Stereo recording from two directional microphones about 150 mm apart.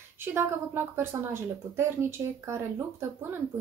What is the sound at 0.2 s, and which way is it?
Speech, 15° right (ahead or behind).